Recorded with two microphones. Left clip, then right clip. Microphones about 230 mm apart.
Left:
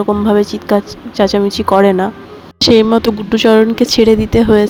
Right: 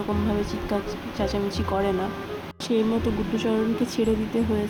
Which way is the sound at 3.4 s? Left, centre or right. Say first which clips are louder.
Left 18 dB; left.